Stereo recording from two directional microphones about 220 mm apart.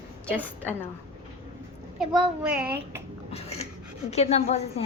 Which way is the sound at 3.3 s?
30° left (ahead or behind).